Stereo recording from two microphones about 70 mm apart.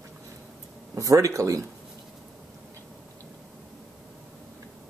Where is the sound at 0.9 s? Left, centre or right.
Right.